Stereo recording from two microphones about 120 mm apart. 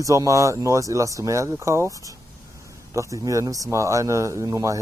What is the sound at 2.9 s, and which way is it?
Speech, 25° right (ahead or behind).